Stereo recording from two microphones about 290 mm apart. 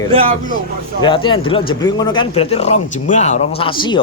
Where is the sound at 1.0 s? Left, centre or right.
Centre.